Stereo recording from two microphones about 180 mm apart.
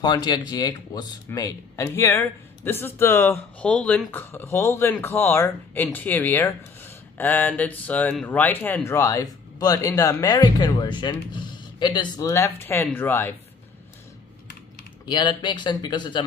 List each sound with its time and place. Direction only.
0.0 s speech: 20° left (ahead or behind)
15.0 s speech: 25° left (ahead or behind)